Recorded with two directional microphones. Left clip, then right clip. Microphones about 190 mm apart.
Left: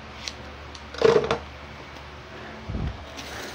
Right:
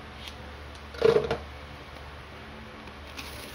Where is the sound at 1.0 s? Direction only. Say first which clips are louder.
Left 3 dB; 20° left (ahead or behind).